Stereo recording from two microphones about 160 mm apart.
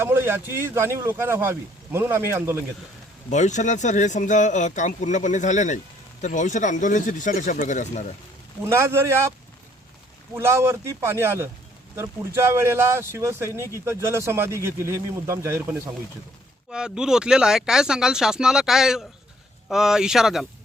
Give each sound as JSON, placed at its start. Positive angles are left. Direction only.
{"t": 0.0, "sound": "speech", "side_deg": -15}
{"t": 3.2, "sound": "speech", "side_deg": 45}
{"t": 8.6, "sound": "speech", "side_deg": -15}
{"t": 10.3, "sound": "speech", "side_deg": -15}
{"t": 16.7, "sound": "speech", "side_deg": -5}